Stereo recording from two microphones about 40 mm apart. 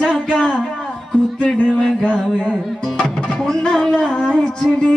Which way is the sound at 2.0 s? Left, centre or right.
Centre.